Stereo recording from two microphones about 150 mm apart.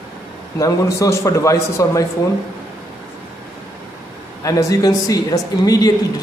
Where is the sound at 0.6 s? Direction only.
20° left (ahead or behind).